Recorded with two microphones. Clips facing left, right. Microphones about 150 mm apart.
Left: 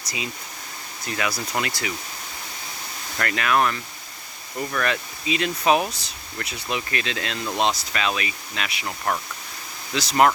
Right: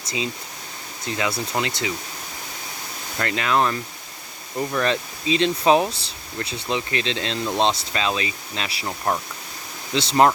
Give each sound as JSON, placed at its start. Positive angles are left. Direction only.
{"t": 1.0, "sound": "speech", "side_deg": -25}
{"t": 3.2, "sound": "speech", "side_deg": -20}
{"t": 8.9, "sound": "speech", "side_deg": -15}
{"t": 9.9, "sound": "speech", "side_deg": -25}